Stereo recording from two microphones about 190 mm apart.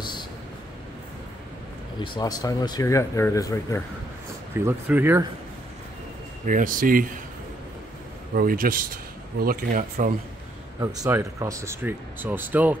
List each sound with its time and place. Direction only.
2.1 s speech: 20° left (ahead or behind)
4.6 s speech: 10° right (ahead or behind)
6.4 s speech: 45° right (ahead or behind)
8.4 s speech: 50° right (ahead or behind)
11.0 s speech: 15° right (ahead or behind)